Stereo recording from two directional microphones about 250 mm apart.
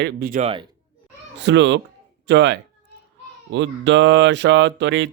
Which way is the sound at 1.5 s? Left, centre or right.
Right.